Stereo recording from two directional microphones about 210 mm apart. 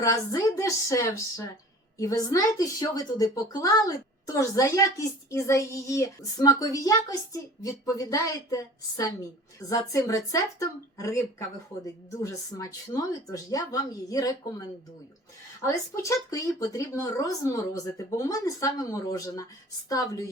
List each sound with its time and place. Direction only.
0.0 s a woman's voice: 15° left (ahead or behind)
15.6 s a woman's voice: 15° left (ahead or behind)